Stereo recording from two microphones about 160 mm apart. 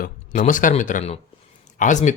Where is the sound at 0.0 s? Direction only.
55° left (ahead or behind).